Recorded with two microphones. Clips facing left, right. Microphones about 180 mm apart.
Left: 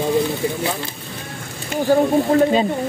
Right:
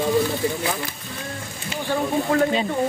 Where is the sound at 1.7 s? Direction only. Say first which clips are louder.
Left 8 dB; 40° left (ahead or behind).